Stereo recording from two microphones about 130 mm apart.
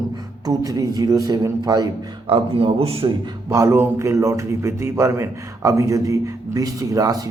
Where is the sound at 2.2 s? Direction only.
45° right (ahead or behind).